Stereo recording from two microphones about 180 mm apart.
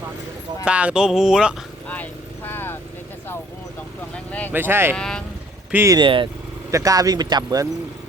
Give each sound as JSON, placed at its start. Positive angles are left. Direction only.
{"t": 0.6, "sound": "a sound", "side_deg": -5}
{"t": 1.9, "sound": "vehicle", "side_deg": 10}
{"t": 4.3, "sound": "speech", "side_deg": 10}
{"t": 4.5, "sound": "speech", "side_deg": -10}
{"t": 4.9, "sound": "a sound", "side_deg": 5}
{"t": 5.7, "sound": "speech", "side_deg": -15}